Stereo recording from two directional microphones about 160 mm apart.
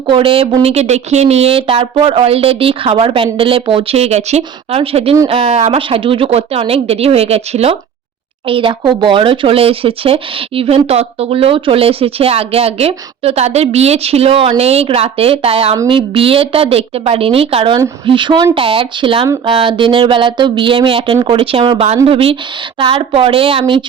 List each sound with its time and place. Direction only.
0.1 s speech: 35° right (ahead or behind)